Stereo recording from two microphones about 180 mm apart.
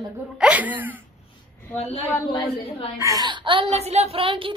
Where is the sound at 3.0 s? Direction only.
20° right (ahead or behind).